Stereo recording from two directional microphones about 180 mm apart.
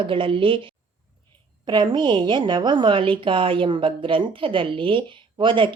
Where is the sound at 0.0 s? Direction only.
30° right (ahead or behind).